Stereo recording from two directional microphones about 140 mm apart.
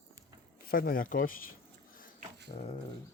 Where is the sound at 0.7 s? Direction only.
90° left.